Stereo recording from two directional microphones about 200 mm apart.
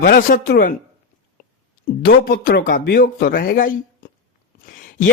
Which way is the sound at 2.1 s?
50° left (ahead or behind).